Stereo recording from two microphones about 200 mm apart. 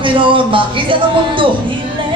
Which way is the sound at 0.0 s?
25° right (ahead or behind).